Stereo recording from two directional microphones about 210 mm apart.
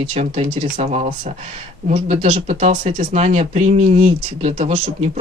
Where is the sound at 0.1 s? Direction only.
30° right (ahead or behind).